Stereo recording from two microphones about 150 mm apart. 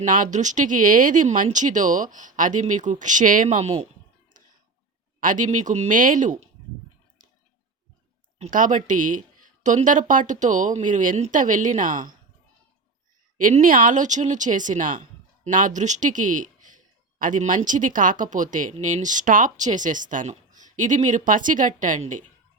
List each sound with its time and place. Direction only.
0.0 s speech: 60° right (ahead or behind)
5.2 s speech: 60° right (ahead or behind)
5.9 s speech: 60° right (ahead or behind)
8.4 s speech: 60° right (ahead or behind)
13.4 s speech: 60° right (ahead or behind)